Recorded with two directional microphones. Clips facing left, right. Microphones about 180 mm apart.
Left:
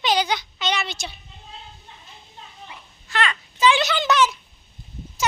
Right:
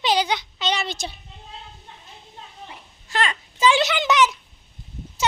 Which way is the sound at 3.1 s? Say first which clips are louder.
Even; 35° right (ahead or behind).